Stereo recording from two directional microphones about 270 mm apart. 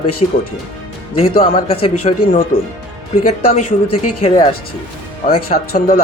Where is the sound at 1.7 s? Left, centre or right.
Left.